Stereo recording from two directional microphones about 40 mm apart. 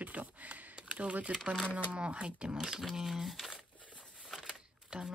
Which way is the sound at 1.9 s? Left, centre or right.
Right.